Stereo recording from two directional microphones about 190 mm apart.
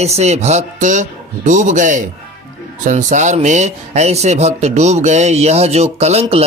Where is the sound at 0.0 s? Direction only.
35° right (ahead or behind).